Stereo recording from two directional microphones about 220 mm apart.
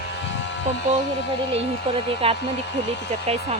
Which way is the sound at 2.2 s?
25° right (ahead or behind).